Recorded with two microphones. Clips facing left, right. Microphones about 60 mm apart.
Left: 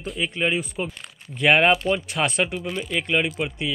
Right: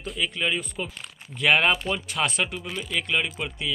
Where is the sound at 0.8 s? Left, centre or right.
Left.